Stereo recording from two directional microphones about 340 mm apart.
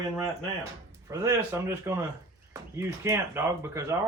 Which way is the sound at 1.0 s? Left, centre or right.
Centre.